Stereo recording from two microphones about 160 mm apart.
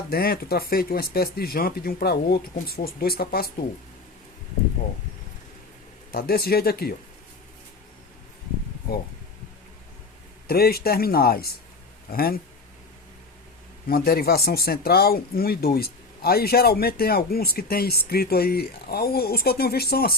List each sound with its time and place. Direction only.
0.1 s speech: 70° left (ahead or behind)
6.1 s speech: 70° left (ahead or behind)
10.4 s speech: 75° left (ahead or behind)
13.8 s speech: 70° left (ahead or behind)